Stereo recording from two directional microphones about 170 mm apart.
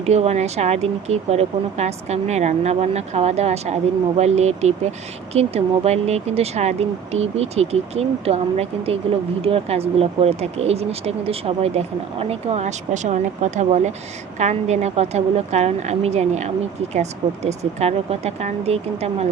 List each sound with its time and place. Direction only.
0.0 s speech: 40° right (ahead or behind)